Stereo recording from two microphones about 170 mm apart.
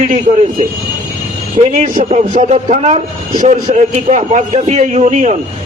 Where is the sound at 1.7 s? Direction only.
45° right (ahead or behind).